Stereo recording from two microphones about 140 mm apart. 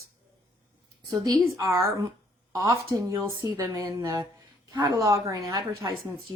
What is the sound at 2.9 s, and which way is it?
A woman's voice, 20° right (ahead or behind).